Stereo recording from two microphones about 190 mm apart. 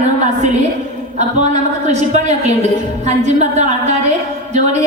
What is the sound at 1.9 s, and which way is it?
A woman's voice, 35° right (ahead or behind).